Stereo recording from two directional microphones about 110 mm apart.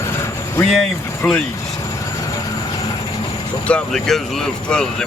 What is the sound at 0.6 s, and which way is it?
Speech, 5° left (ahead or behind).